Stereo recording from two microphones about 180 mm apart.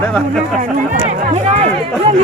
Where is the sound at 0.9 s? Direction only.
35° right (ahead or behind).